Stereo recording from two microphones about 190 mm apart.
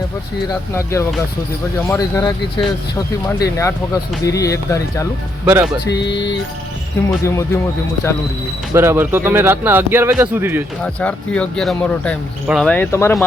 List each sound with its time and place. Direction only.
0.7 s speech: 15° left (ahead or behind)
5.5 s speech: 10° right (ahead or behind)
5.9 s music: 65° left (ahead or behind)
7.3 s speech: 15° left (ahead or behind)
8.7 s speech: 15° right (ahead or behind)
10.8 s speech: 5° left (ahead or behind)